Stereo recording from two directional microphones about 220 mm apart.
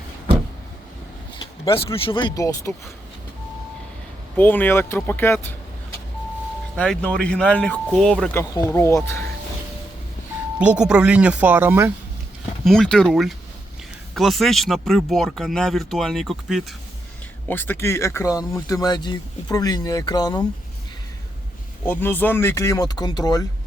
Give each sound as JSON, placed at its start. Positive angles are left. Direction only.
{"t": 1.4, "sound": "speech", "side_deg": 25}
{"t": 4.4, "sound": "speech", "side_deg": 10}
{"t": 6.7, "sound": "speech", "side_deg": 5}
{"t": 10.6, "sound": "speech", "side_deg": -5}
{"t": 12.6, "sound": "speech", "side_deg": 0}
{"t": 21.8, "sound": "speech", "side_deg": 10}